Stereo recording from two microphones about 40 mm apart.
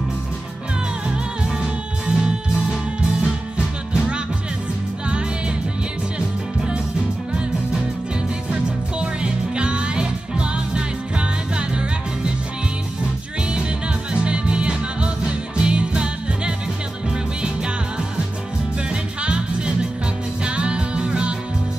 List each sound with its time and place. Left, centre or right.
2.0 s music: centre
6.1 s music: right
9.0 s music: right
14.1 s music: right
19.2 s music: right